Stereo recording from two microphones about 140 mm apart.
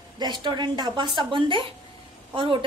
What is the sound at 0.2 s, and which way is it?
A woman's voice, 30° right (ahead or behind).